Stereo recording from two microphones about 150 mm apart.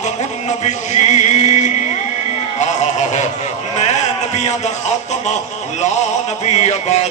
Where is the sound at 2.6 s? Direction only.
50° left (ahead or behind).